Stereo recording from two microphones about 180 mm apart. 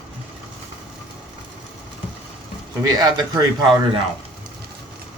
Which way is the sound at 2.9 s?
20° right (ahead or behind).